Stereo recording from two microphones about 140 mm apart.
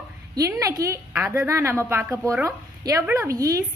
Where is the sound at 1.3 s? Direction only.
20° right (ahead or behind).